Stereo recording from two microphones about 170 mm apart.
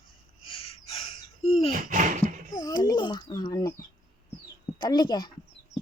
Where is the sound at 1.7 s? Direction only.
50° right (ahead or behind).